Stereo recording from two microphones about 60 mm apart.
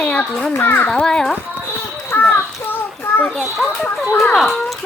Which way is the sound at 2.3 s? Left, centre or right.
Left.